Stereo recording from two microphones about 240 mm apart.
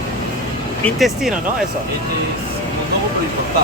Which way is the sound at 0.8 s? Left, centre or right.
Centre.